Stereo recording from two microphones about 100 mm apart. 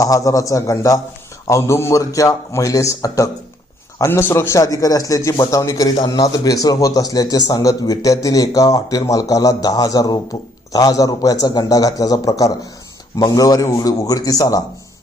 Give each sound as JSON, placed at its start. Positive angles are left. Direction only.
{"t": 0.0, "sound": "a man's voice", "side_deg": 35}